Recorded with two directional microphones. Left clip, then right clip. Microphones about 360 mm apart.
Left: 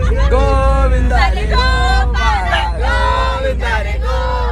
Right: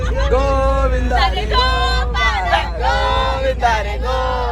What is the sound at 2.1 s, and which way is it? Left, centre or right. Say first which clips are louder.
Vehicle: even; right.